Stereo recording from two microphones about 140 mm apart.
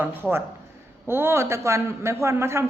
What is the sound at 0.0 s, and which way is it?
A man's voice, 15° right (ahead or behind).